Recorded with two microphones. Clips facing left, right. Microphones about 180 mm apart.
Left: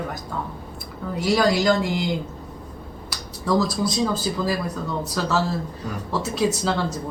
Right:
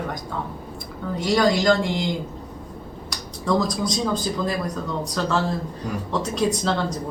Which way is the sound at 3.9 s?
5° left (ahead or behind).